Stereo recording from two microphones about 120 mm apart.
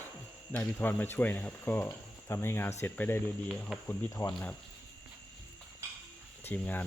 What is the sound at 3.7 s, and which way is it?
Cricket, centre (ahead or behind).